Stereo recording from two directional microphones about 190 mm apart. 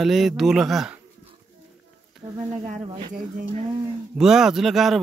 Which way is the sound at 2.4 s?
35° right (ahead or behind).